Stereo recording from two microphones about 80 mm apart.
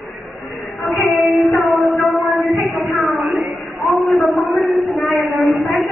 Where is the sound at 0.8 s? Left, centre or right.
Centre.